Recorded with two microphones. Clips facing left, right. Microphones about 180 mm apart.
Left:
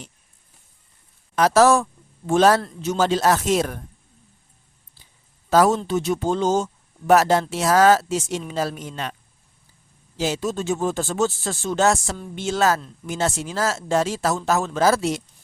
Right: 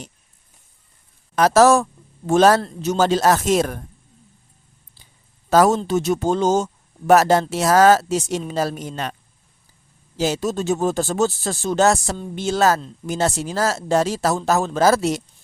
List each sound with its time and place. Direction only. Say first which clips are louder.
1.4 s a woman's voice: right 2 dB; 45° right (ahead or behind)
5.5 s speech: right 2 dB; 45° right (ahead or behind)
10.2 s speech: right 3 dB; 40° right (ahead or behind)